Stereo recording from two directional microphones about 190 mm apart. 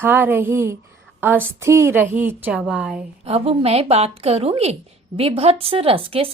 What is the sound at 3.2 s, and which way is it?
A woman's voice, 30° right (ahead or behind).